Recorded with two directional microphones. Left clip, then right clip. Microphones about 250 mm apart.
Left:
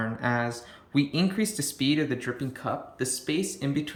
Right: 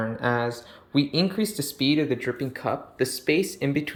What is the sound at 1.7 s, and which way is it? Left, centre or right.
Speech, centre.